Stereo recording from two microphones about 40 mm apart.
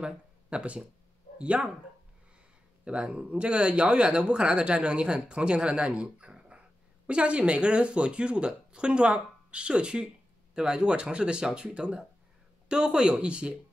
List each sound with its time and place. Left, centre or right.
0.0 s speech: right
2.8 s speech: right